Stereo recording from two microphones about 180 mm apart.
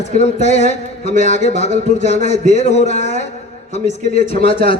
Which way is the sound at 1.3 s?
35° left (ahead or behind).